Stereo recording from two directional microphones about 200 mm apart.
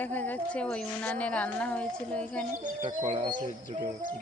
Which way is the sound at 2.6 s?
40° right (ahead or behind).